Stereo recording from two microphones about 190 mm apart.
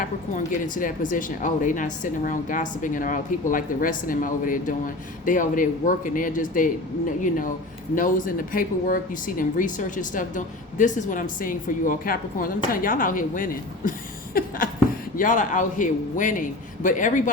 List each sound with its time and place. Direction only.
0.0 s speech: 45° left (ahead or behind)